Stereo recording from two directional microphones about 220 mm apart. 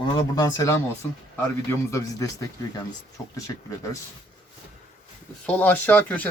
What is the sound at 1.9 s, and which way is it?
Speech, 15° left (ahead or behind).